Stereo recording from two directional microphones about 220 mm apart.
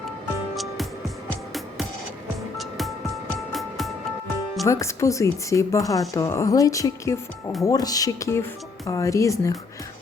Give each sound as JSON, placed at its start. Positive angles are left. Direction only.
{"t": 0.5, "sound": "music", "side_deg": 0}
{"t": 2.6, "sound": "music", "side_deg": 0}
{"t": 4.6, "sound": "speech", "side_deg": 15}